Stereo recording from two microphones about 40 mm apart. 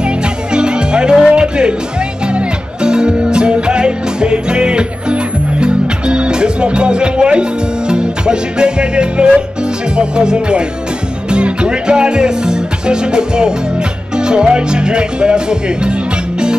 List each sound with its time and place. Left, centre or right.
0.0 s music: right
11.2 s speech: right
14.1 s music: right